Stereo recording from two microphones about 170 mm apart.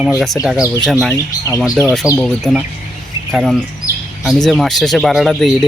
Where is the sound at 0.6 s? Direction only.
20° left (ahead or behind).